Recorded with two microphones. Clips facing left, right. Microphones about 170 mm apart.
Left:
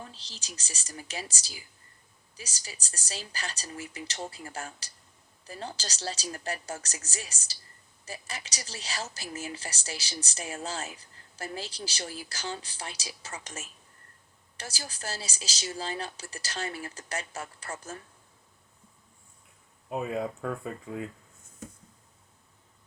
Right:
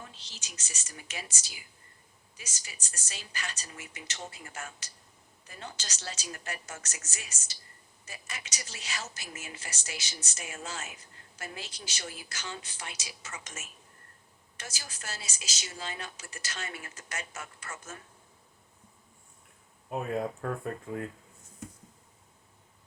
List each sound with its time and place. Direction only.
0.1 s a woman's voice: 35° left (ahead or behind)
19.9 s speech: centre (ahead or behind)